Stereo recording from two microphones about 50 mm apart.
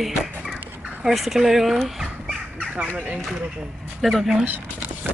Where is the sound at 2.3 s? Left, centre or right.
Centre.